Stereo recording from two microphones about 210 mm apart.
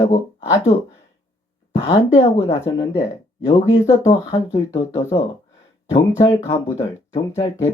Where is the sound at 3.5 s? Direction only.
15° left (ahead or behind).